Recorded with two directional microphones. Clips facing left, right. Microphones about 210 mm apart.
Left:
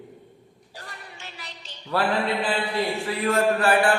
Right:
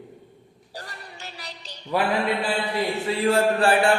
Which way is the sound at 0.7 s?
40° right (ahead or behind).